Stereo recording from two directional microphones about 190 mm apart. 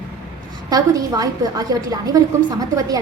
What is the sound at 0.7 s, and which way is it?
A woman's voice, 20° right (ahead or behind).